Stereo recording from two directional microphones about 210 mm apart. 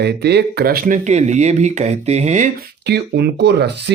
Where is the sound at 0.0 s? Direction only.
50° right (ahead or behind); by 2.6 s 35° right (ahead or behind).